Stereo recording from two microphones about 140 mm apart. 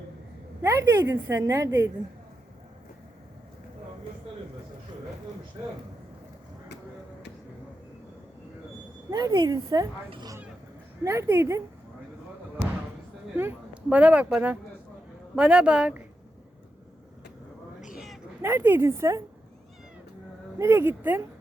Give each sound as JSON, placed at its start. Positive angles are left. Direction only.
{"t": 0.6, "sound": "a woman's voice", "side_deg": -20}
{"t": 9.0, "sound": "a woman's voice", "side_deg": -30}
{"t": 11.0, "sound": "a woman's voice", "side_deg": -20}
{"t": 13.3, "sound": "a woman's voice", "side_deg": -15}
{"t": 17.9, "sound": "a sound", "side_deg": 0}
{"t": 18.4, "sound": "a woman's voice", "side_deg": -15}
{"t": 20.6, "sound": "a woman's voice", "side_deg": -15}